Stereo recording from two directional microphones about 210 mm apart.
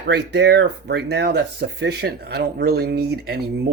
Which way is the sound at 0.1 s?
55° right (ahead or behind).